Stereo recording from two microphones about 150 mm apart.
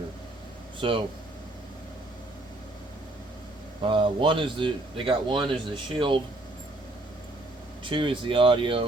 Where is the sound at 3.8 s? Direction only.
35° right (ahead or behind).